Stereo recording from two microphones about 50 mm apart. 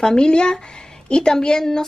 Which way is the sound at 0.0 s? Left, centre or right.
Centre.